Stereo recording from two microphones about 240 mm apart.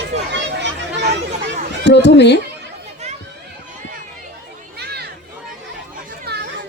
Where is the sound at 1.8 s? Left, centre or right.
Left.